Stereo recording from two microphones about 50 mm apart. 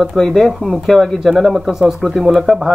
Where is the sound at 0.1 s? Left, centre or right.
Centre.